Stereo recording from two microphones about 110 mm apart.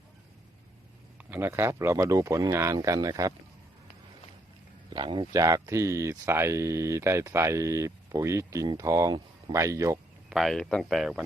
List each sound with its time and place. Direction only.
1.2 s speech: 15° right (ahead or behind); by 3.3 s 30° right (ahead or behind)
4.9 s speech: 45° right (ahead or behind)
5.3 s speech: 30° right (ahead or behind)
10.2 s speech: centre (ahead or behind)